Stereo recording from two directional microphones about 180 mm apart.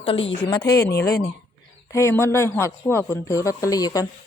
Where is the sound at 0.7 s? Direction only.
65° left (ahead or behind).